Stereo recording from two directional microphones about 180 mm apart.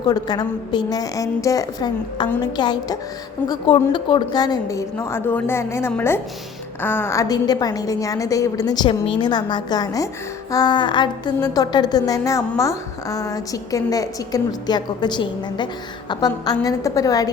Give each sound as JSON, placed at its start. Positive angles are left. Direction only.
{"t": 0.0, "sound": "a woman's voice", "side_deg": 20}